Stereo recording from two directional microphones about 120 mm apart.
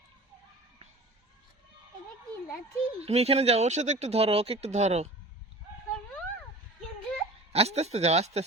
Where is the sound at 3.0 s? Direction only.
60° right (ahead or behind).